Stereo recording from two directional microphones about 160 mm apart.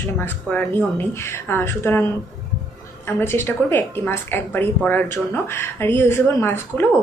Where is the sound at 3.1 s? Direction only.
15° left (ahead or behind).